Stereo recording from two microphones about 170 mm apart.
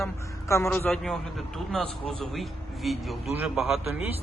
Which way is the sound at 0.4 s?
15° left (ahead or behind).